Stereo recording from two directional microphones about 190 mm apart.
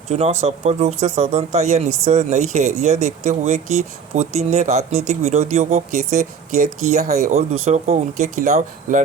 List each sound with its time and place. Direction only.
0.1 s speech: 35° right (ahead or behind)